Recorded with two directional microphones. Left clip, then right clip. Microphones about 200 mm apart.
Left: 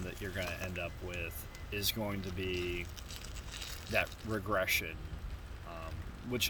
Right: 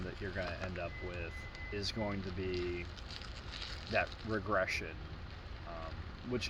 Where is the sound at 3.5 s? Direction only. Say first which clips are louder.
Even; 75° left (ahead or behind).